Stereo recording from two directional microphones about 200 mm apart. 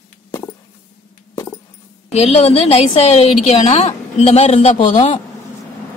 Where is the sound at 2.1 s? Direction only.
30° left (ahead or behind).